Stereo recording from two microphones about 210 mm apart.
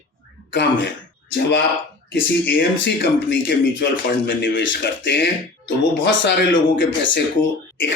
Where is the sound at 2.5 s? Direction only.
60° left (ahead or behind).